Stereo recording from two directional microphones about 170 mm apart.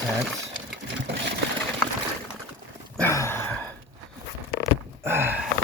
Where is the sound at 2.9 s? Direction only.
15° left (ahead or behind).